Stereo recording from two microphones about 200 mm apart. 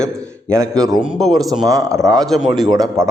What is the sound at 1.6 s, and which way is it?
Speech, 15° right (ahead or behind).